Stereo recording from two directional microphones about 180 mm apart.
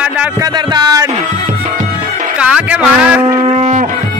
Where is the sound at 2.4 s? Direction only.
5° right (ahead or behind).